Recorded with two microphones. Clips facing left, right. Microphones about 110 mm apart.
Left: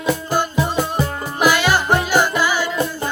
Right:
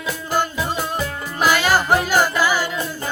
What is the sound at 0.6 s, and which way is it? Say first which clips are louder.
Music: left 3 dB; 15° left (ahead or behind).